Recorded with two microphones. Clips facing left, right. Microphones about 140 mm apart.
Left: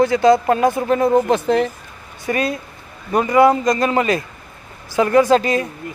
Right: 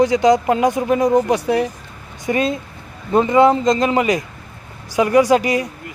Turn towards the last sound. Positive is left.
turn(degrees=-15)  # may be behind; listen again after turning